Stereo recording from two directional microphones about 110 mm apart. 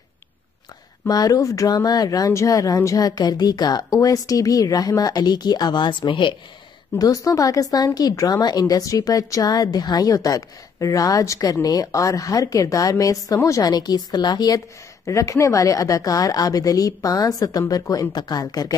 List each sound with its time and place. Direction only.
1.0 s speech: 35° left (ahead or behind)
7.0 s speech: 30° left (ahead or behind)